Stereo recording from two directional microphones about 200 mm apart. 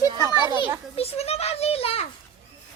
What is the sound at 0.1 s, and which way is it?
Children playing, 25° right (ahead or behind).